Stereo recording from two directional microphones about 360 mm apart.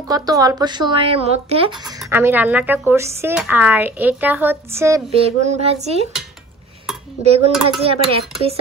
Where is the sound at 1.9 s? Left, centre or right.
Centre.